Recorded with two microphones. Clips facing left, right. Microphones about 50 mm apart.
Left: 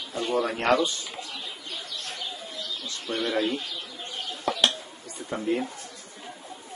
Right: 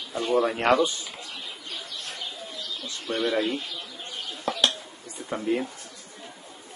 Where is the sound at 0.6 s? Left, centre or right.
Centre.